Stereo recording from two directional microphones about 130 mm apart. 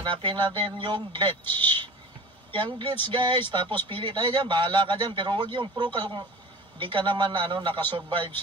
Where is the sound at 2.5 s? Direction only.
35° right (ahead or behind).